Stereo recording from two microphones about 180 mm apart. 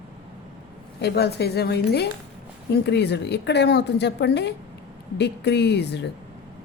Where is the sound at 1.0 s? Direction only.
65° left (ahead or behind).